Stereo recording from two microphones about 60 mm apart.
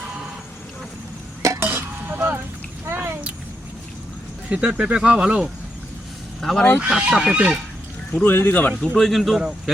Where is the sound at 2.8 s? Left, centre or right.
Right.